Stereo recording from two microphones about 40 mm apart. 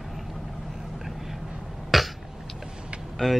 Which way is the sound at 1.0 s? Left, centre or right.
Centre.